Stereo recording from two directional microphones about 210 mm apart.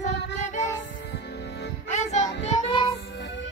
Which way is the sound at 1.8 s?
35° left (ahead or behind).